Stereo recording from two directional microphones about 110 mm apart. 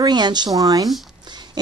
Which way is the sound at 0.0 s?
40° right (ahead or behind).